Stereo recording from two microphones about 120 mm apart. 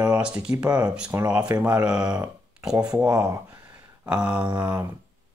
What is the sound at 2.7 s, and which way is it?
Speech, 30° right (ahead or behind).